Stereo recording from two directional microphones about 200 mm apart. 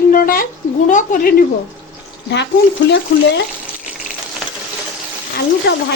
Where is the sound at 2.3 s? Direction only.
60° left (ahead or behind).